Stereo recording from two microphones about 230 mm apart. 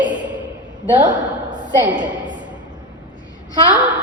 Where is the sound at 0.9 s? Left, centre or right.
Right.